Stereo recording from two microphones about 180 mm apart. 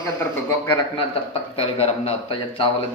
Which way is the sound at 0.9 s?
30° left (ahead or behind).